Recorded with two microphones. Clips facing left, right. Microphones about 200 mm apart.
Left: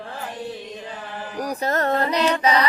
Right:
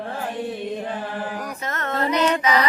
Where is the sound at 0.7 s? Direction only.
60° right (ahead or behind).